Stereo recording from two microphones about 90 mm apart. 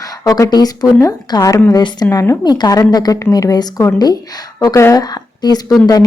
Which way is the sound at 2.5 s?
45° left (ahead or behind).